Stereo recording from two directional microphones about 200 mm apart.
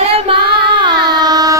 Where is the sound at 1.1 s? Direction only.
20° right (ahead or behind).